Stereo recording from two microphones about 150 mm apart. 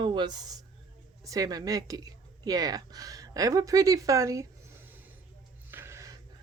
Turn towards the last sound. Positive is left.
turn(degrees=-20)  # may be behind; listen again after turning